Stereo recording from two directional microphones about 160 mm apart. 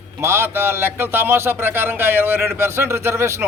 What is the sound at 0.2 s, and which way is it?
A man's voice, 15° right (ahead or behind).